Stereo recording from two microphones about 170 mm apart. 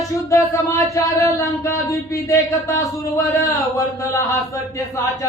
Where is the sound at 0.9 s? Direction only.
20° left (ahead or behind).